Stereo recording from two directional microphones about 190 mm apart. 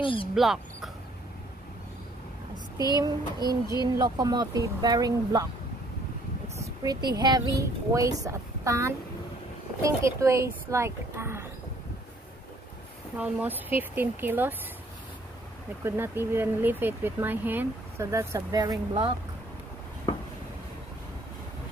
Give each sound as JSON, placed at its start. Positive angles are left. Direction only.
{"t": 0.0, "sound": "speech", "side_deg": 30}
{"t": 0.3, "sound": "speech", "side_deg": 0}
{"t": 3.0, "sound": "speech", "side_deg": -20}
{"t": 6.6, "sound": "speech", "side_deg": -20}
{"t": 13.2, "sound": "speech", "side_deg": -10}
{"t": 15.8, "sound": "speech", "side_deg": -10}